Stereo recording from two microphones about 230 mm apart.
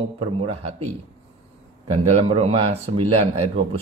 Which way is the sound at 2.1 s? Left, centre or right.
Right.